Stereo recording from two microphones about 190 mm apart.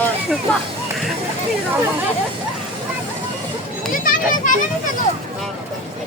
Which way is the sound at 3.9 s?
45° left (ahead or behind).